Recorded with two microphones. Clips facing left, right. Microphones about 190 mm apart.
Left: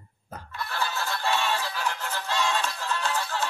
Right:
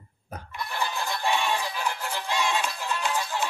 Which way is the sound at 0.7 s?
15° right (ahead or behind).